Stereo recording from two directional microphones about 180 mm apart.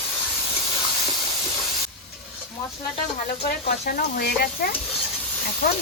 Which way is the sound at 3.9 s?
55° left (ahead or behind).